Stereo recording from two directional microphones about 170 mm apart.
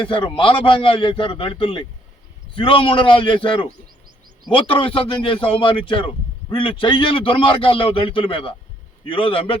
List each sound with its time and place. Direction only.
0.0 s a man's voice: 30° left (ahead or behind)